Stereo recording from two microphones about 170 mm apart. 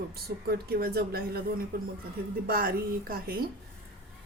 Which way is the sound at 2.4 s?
60° right (ahead or behind).